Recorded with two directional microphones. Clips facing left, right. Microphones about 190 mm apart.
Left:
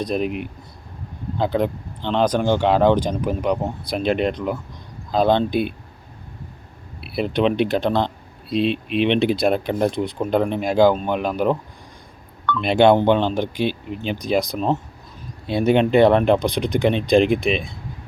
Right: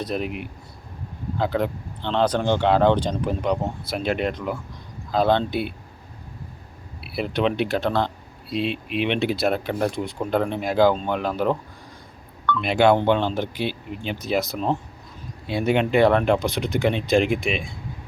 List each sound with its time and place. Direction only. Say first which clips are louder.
0.0 s speech: left 4 dB; 20° left (ahead or behind)
7.0 s speech: left 3 dB; 20° left (ahead or behind)
12.6 s speech: left 3 dB; 20° left (ahead or behind)
17.2 s speech: left 4 dB; 15° right (ahead or behind)